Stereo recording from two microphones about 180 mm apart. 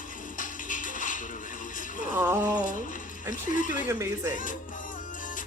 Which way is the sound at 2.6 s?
45° left (ahead or behind).